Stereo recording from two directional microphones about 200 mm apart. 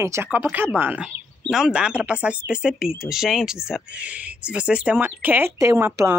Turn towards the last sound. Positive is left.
turn(degrees=-15)  # may be behind; listen again after turning